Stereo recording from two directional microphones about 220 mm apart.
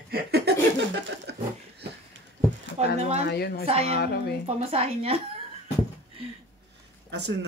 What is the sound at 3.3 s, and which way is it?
Speech, 45° left (ahead or behind).